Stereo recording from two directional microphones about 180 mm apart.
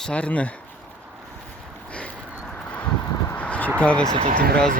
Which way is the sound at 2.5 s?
5° left (ahead or behind).